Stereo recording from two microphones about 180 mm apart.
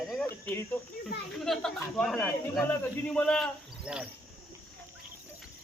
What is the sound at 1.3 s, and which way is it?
Speech, centre (ahead or behind).